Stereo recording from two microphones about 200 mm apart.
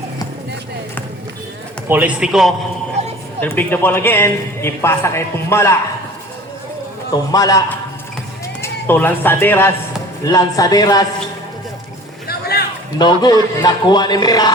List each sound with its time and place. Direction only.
1.9 s a man's voice: 5° right (ahead or behind)
3.0 s vehicle: 35° right (ahead or behind)
3.4 s a man's voice: 10° left (ahead or behind)
7.3 s a man's voice: 20° left (ahead or behind)
12.3 s a sound: 50° left (ahead or behind)
13.0 s a man's voice: 20° left (ahead or behind)